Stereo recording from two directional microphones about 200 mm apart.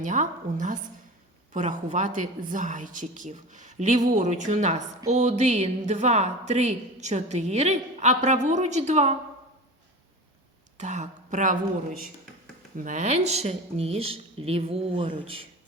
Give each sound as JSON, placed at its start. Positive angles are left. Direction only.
{"t": 0.0, "sound": "a woman's voice", "side_deg": -40}
{"t": 10.8, "sound": "speech", "side_deg": -35}
{"t": 12.7, "sound": "speech", "side_deg": -40}